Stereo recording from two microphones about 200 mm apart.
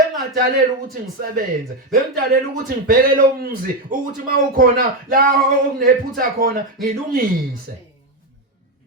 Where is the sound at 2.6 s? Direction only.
45° right (ahead or behind).